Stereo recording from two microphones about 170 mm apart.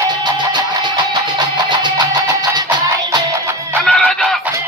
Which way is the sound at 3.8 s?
5° left (ahead or behind).